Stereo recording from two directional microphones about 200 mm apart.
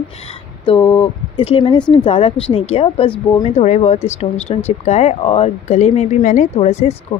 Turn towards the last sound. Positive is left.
turn(degrees=35)  # may be behind; listen again after turning